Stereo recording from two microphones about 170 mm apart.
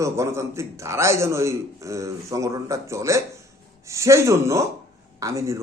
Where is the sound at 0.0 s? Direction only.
15° right (ahead or behind).